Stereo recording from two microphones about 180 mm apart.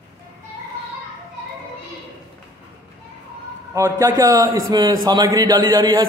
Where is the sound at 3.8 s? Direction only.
15° right (ahead or behind).